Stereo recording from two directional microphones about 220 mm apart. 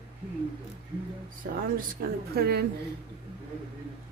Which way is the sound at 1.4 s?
40° right (ahead or behind).